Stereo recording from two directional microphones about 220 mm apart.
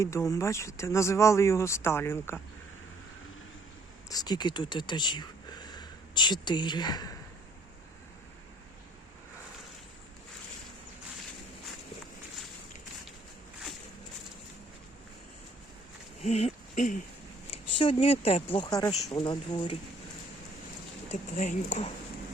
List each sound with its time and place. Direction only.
0.0 s speech: 15° left (ahead or behind)
4.1 s speech: 15° left (ahead or behind)
16.2 s speech: 30° left (ahead or behind)
17.7 s speech: 25° left (ahead or behind)
21.1 s speech: 30° left (ahead or behind)